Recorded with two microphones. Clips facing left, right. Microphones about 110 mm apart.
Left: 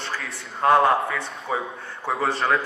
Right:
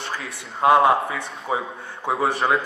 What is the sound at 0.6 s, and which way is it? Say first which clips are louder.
Speech: right 2 dB; 10° right (ahead or behind).